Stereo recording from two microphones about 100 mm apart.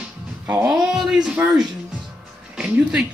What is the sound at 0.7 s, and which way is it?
Speech, 5° right (ahead or behind).